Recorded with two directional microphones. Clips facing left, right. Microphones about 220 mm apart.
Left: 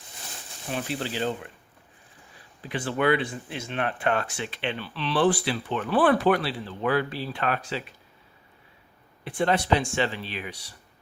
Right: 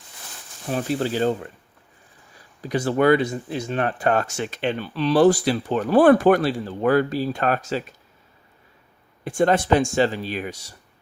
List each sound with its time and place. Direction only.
0.7 s speech: 40° right (ahead or behind)
2.6 s speech: 40° right (ahead or behind)
9.2 s speech: 45° right (ahead or behind)